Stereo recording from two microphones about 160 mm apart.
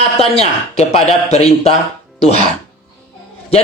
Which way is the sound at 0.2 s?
40° left (ahead or behind).